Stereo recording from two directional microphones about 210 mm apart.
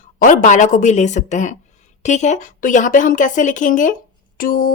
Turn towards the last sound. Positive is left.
turn(degrees=40)  # may be behind; listen again after turning